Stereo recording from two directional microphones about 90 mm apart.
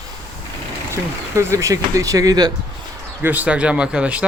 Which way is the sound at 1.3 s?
35° right (ahead or behind).